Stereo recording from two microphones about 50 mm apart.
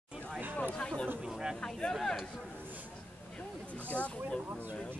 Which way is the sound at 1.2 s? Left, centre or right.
Centre.